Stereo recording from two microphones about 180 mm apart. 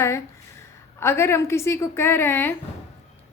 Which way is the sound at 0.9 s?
15° left (ahead or behind).